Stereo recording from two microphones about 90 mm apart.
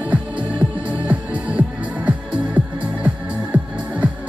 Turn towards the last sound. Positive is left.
turn(degrees=-15)  # may be behind; listen again after turning